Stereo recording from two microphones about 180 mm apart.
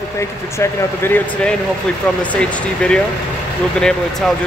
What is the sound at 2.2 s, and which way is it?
Speech, 5° left (ahead or behind).